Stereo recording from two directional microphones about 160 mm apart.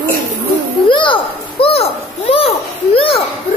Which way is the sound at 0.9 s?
30° left (ahead or behind).